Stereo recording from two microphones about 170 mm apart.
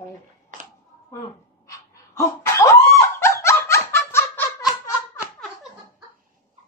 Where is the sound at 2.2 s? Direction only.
15° left (ahead or behind).